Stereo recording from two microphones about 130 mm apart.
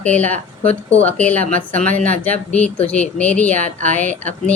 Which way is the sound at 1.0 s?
10° left (ahead or behind).